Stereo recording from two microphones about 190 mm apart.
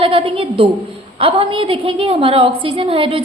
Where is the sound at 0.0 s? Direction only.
30° right (ahead or behind).